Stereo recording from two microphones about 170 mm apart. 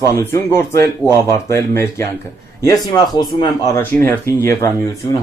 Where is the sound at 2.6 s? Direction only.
25° left (ahead or behind).